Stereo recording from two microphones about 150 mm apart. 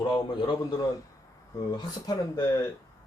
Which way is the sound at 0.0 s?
30° left (ahead or behind).